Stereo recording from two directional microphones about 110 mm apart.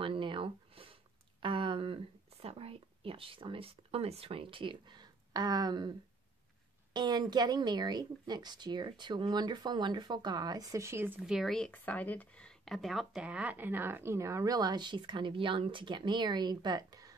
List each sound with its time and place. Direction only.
0.0 s a sound: 50° right (ahead or behind)
6.9 s speech: 40° right (ahead or behind); by 11.1 s 20° right (ahead or behind)
11.2 s speech: centre (ahead or behind)
11.7 s speech: 15° left (ahead or behind); by 17.1 s 35° right (ahead or behind)